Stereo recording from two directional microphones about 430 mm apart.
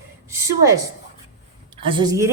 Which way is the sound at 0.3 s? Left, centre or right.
Centre.